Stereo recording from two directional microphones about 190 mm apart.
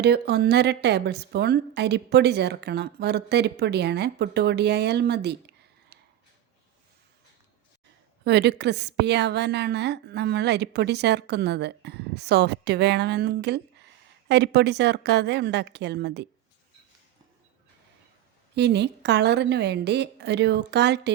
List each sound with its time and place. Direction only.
0.0 s a woman's voice: 60° right (ahead or behind)
8.2 s a woman's voice: 60° right (ahead or behind)
18.5 s a woman's voice: 65° right (ahead or behind)